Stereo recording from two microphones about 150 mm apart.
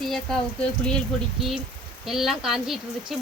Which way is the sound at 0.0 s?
5° left (ahead or behind).